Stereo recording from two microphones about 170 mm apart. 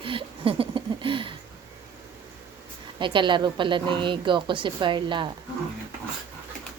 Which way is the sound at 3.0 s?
30° right (ahead or behind).